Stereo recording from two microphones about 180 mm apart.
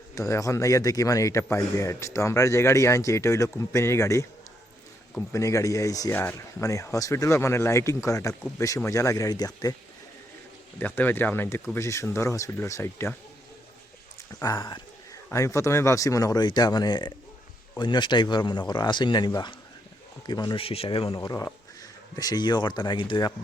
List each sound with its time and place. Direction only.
0.1 s speech: 15° left (ahead or behind)
5.3 s speech: 15° left (ahead or behind)
10.8 s speech: 10° left (ahead or behind)
14.4 s speech: 20° left (ahead or behind)
21.2 s speech: 15° left (ahead or behind)